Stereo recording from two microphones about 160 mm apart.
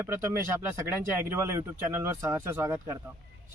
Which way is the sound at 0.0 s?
15° right (ahead or behind).